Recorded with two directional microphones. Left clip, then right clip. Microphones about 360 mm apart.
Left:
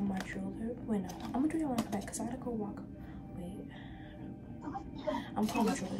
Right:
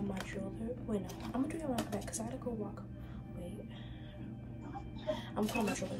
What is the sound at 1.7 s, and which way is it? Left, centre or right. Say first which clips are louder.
Speech: left 1 dB; centre.